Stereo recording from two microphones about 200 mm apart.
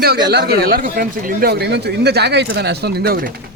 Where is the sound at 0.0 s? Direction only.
55° right (ahead or behind).